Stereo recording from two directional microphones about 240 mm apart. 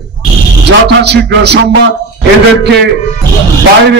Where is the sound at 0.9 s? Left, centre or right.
Right.